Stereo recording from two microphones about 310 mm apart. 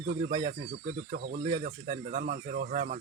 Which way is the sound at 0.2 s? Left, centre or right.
Centre.